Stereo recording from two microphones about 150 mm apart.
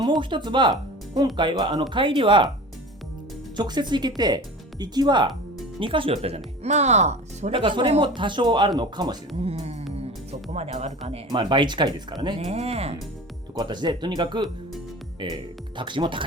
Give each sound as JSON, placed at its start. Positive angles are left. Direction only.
{"t": 0.0, "sound": "speech", "side_deg": -30}
{"t": 3.6, "sound": "speech", "side_deg": -30}
{"t": 7.6, "sound": "speech", "side_deg": -35}
{"t": 9.4, "sound": "speech", "side_deg": -45}
{"t": 11.3, "sound": "speech", "side_deg": -30}
{"t": 12.4, "sound": "speech", "side_deg": -45}
{"t": 13.6, "sound": "speech", "side_deg": -30}